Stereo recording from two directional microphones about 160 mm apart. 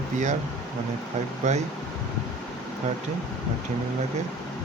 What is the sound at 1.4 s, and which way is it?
Speech, 45° right (ahead or behind).